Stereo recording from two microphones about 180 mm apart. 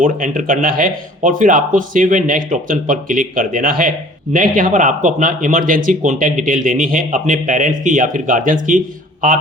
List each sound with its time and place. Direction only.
0.0 s speech: 45° right (ahead or behind)